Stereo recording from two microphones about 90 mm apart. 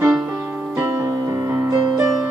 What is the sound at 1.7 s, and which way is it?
Music, 40° right (ahead or behind).